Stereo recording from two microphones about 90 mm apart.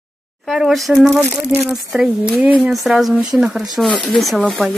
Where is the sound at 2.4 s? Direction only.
15° right (ahead or behind).